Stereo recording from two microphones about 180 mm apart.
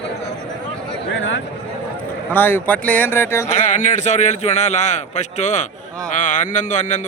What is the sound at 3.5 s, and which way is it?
A man's voice, 45° left (ahead or behind).